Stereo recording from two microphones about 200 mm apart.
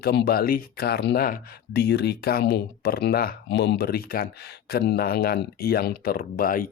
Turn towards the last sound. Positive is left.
turn(degrees=45)  # may be behind; listen again after turning